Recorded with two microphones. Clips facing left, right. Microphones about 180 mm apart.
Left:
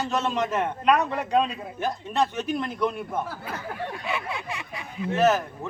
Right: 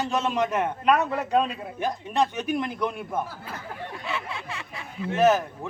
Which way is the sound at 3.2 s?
65° left (ahead or behind).